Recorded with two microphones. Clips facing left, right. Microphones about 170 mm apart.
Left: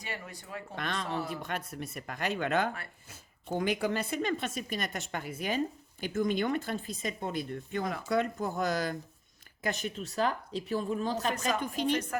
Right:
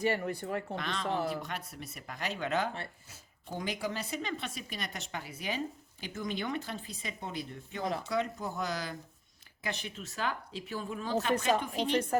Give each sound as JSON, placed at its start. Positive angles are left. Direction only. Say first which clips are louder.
{"t": 0.0, "sound": "speech", "louder": "right 11 dB", "side_deg": -55}
{"t": 0.8, "sound": "speech", "louder": "left 3 dB", "side_deg": 50}